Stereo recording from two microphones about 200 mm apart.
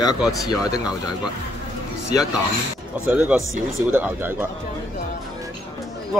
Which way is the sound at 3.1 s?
5° right (ahead or behind).